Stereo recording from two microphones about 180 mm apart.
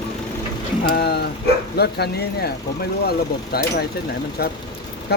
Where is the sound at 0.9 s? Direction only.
60° left (ahead or behind).